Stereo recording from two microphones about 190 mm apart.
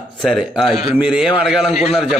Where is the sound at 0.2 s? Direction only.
Centre (ahead or behind).